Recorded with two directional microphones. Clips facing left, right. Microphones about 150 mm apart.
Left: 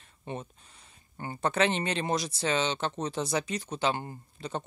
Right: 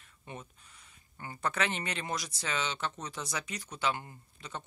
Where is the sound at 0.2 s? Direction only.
30° left (ahead or behind).